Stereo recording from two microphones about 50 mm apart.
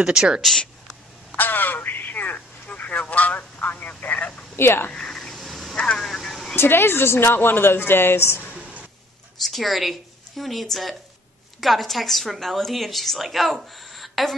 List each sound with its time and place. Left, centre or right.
0.0 s speech: centre
1.3 s a sound: left
2.7 s speech: left
4.0 s telephone: left
4.6 s a woman's voice: left
4.9 s snake: centre
5.9 s vehicle: centre
6.5 s a woman's voice: left
8.5 s a sound: centre
9.4 s a woman's voice: centre